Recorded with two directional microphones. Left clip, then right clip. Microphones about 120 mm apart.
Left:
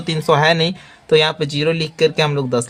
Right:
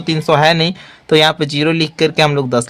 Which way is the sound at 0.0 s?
25° right (ahead or behind).